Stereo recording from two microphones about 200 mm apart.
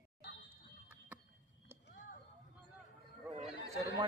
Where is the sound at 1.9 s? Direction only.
45° left (ahead or behind).